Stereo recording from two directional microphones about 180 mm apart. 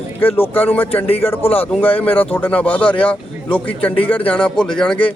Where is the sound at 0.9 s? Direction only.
35° left (ahead or behind).